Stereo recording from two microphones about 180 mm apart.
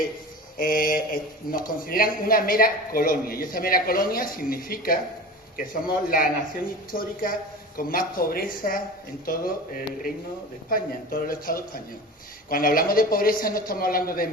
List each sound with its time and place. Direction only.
0.6 s a man's voice: 55° left (ahead or behind)